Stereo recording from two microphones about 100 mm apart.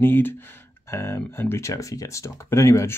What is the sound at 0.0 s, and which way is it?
Speech, 20° left (ahead or behind).